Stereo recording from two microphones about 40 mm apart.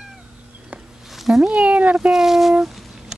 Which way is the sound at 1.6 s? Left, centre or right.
Right.